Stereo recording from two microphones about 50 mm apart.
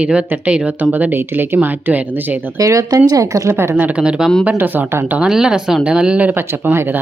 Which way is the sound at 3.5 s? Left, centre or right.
Right.